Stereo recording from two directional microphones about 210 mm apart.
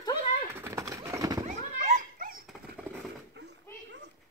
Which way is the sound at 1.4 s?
35° right (ahead or behind).